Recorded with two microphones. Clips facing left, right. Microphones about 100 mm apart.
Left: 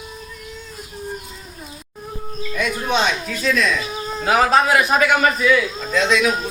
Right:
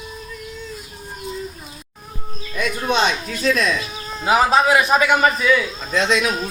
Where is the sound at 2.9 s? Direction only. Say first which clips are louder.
Right 2 dB; 45° right (ahead or behind).